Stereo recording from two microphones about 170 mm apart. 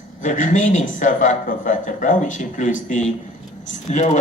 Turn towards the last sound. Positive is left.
turn(degrees=45)  # may be behind; listen again after turning